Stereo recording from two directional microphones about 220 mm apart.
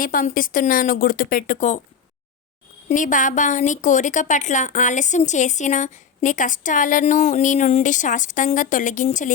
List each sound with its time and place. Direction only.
0.0 s a woman's voice: 40° left (ahead or behind)
2.9 s a woman's voice: 35° left (ahead or behind)